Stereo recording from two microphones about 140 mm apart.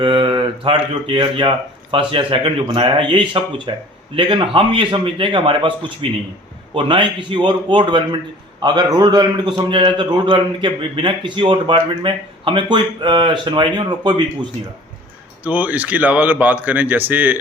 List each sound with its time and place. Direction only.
0.0 s a man's voice: 40° right (ahead or behind)
15.4 s speech: 10° right (ahead or behind)